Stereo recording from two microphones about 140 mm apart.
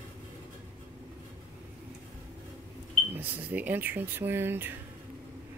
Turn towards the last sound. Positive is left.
turn(degrees=-15)  # may be behind; listen again after turning